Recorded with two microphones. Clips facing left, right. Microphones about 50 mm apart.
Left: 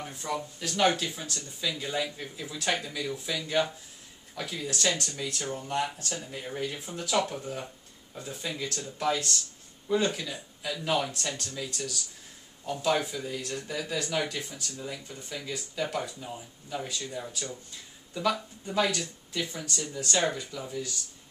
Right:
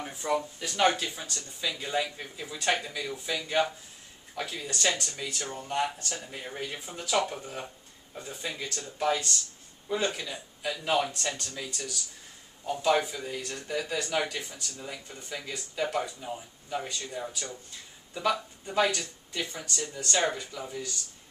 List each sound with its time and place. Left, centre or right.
0.0 s speech: centre